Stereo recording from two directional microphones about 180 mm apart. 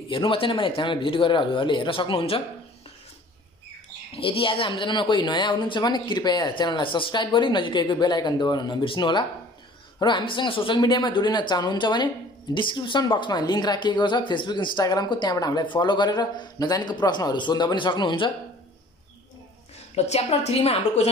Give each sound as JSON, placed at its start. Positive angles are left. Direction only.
{"t": 0.1, "sound": "a woman's voice", "side_deg": 30}
{"t": 4.1, "sound": "a woman's voice", "side_deg": 30}
{"t": 20.1, "sound": "a woman's voice", "side_deg": 35}